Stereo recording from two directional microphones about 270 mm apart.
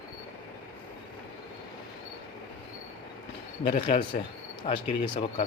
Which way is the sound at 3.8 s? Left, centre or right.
Centre.